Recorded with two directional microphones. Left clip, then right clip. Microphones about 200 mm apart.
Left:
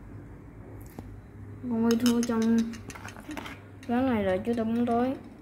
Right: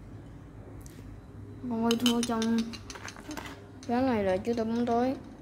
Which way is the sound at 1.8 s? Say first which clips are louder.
Left 1 dB; 10° right (ahead or behind).